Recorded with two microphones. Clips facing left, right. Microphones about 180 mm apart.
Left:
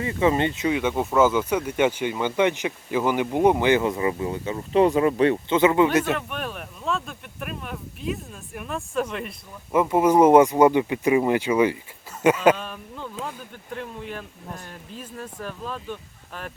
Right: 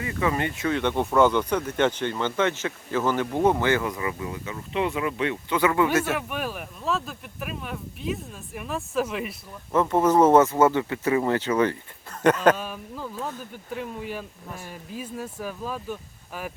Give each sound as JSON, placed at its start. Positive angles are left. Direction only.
{"t": 0.0, "sound": "speech", "side_deg": 25}
{"t": 0.8, "sound": "speech", "side_deg": 5}
{"t": 5.5, "sound": "speech", "side_deg": 20}
{"t": 6.1, "sound": "speech", "side_deg": -5}
{"t": 9.7, "sound": "speech", "side_deg": 10}
{"t": 12.5, "sound": "speech", "side_deg": -5}
{"t": 13.1, "sound": "speech", "side_deg": 10}
{"t": 13.7, "sound": "speech", "side_deg": -5}